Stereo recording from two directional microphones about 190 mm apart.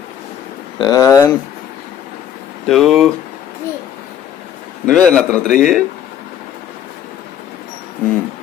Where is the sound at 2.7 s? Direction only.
Centre (ahead or behind).